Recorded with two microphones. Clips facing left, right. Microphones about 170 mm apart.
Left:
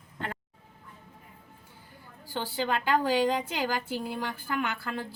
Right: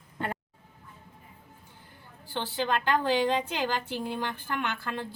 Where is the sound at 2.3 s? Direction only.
10° left (ahead or behind).